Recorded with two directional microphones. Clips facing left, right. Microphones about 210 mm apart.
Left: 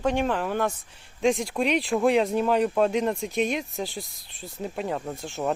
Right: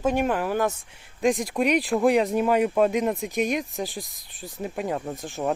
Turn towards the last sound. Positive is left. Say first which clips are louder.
# even
turn(degrees=-15)  # may be behind; listen again after turning